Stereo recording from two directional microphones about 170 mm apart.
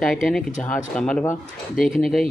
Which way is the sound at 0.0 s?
Centre (ahead or behind).